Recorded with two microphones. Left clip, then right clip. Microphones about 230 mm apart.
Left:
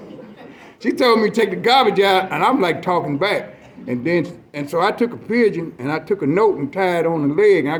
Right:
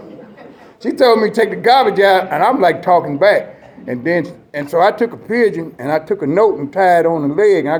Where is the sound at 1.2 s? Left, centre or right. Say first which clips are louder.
Right 4 dB; left.